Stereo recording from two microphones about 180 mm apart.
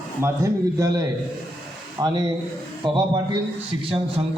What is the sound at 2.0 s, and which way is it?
A man's voice, 25° right (ahead or behind).